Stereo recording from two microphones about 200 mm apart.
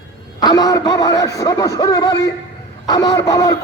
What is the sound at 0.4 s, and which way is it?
A man's voice, 20° left (ahead or behind).